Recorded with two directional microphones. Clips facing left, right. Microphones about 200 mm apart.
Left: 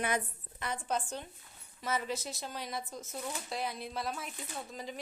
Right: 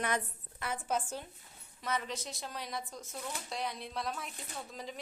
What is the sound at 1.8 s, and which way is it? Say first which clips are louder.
Speech: left 2 dB; 5° left (ahead or behind).